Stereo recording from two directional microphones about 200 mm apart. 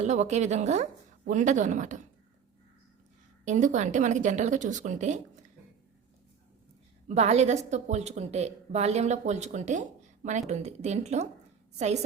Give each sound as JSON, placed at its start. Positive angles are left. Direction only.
{"t": 0.0, "sound": "a woman's voice", "side_deg": -35}
{"t": 3.4, "sound": "a woman's voice", "side_deg": -40}
{"t": 7.1, "sound": "a woman's voice", "side_deg": -35}